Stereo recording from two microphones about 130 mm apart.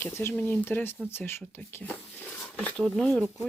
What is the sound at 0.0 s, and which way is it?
Speech, 20° left (ahead or behind).